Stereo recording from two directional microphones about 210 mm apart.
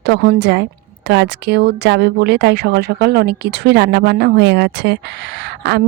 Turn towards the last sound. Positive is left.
turn(degrees=-55)  # may be behind; listen again after turning